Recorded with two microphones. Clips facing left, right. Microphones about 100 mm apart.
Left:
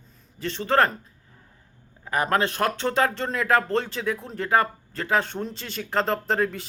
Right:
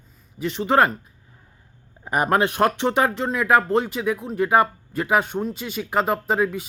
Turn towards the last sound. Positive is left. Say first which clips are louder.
# right 3 dB
turn(degrees=-10)  # may be behind; listen again after turning